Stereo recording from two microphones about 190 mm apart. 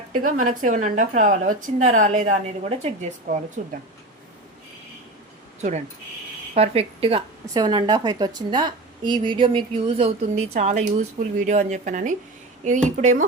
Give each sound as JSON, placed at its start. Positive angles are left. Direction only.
{"t": 0.1, "sound": "speech", "side_deg": -45}
{"t": 6.5, "sound": "speech", "side_deg": -30}
{"t": 7.5, "sound": "a woman's voice", "side_deg": -20}